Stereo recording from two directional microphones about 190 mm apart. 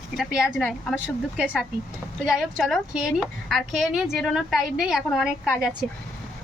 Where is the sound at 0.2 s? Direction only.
Centre (ahead or behind).